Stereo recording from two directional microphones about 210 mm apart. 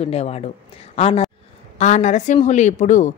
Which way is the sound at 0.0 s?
30° left (ahead or behind).